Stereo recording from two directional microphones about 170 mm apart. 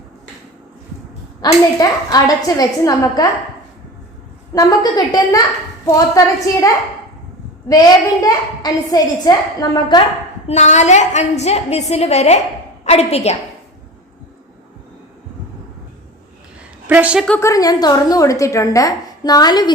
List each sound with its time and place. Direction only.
1.4 s a woman's voice: 20° left (ahead or behind)
4.5 s a woman's voice: 20° left (ahead or behind)
7.7 s a woman's voice: 20° left (ahead or behind)
10.4 s a woman's voice: 40° left (ahead or behind)
16.8 s a woman's voice: 10° right (ahead or behind)
17.2 s a woman's voice: 10° left (ahead or behind)
17.5 s a woman's voice: 20° left (ahead or behind)